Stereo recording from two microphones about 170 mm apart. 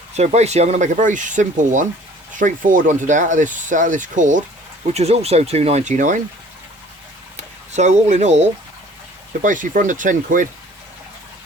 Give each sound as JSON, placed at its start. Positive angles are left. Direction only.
{"t": 0.2, "sound": "speech", "side_deg": -40}
{"t": 7.3, "sound": "speech", "side_deg": -40}